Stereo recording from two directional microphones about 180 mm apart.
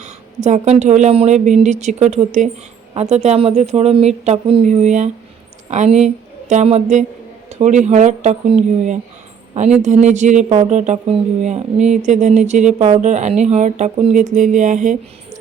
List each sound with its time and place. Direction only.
0.4 s a woman's voice: 40° right (ahead or behind)